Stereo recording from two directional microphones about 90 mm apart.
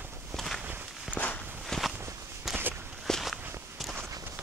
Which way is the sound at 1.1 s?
15° left (ahead or behind).